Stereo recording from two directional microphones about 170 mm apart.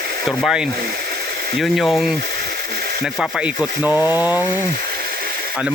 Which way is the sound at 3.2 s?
5° right (ahead or behind).